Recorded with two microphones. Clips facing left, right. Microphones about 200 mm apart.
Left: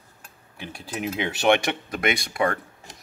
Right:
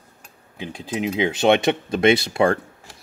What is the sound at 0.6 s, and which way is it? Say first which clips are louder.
Speech: right 5 dB; 15° right (ahead or behind).